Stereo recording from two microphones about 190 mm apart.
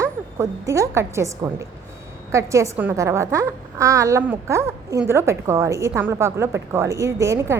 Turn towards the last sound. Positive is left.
turn(degrees=-15)  # may be behind; listen again after turning